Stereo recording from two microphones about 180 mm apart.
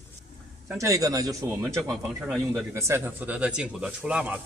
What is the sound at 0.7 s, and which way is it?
Speech, 20° right (ahead or behind).